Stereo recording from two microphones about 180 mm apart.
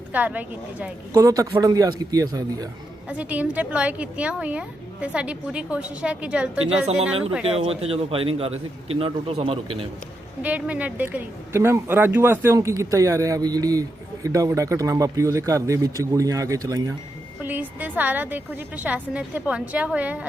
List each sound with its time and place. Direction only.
0.1 s speech: 10° right (ahead or behind)
3.1 s speech: 10° right (ahead or behind)
7.4 s a man's voice: 35° right (ahead or behind)
10.4 s speech: 10° right (ahead or behind)